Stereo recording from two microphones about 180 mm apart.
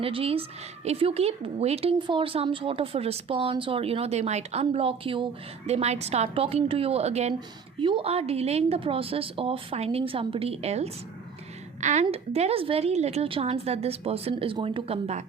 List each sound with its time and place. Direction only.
0.0 s a woman's voice: 30° right (ahead or behind)